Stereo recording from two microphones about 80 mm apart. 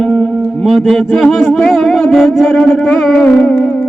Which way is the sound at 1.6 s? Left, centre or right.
Centre.